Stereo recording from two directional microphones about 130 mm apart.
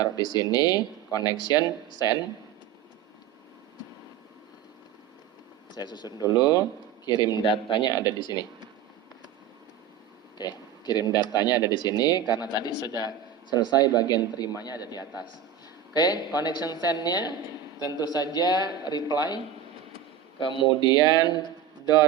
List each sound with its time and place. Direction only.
0.0 s speech: 35° left (ahead or behind)
5.7 s speech: 35° left (ahead or behind)
10.3 s speech: 35° left (ahead or behind)
20.4 s speech: 35° left (ahead or behind)